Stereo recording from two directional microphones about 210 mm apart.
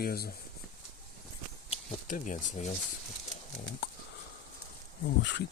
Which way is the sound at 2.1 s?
35° left (ahead or behind).